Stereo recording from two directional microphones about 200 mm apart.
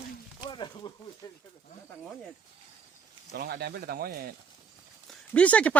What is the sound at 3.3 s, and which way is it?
Speech, 50° right (ahead or behind).